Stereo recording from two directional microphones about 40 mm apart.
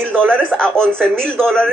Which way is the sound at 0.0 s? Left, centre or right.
Right.